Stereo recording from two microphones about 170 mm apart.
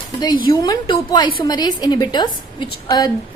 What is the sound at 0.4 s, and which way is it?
A woman's voice, 25° left (ahead or behind).